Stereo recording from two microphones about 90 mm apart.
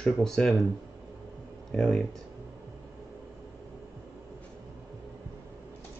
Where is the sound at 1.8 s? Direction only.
Centre (ahead or behind).